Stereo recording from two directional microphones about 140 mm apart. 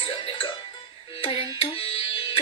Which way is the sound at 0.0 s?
40° left (ahead or behind).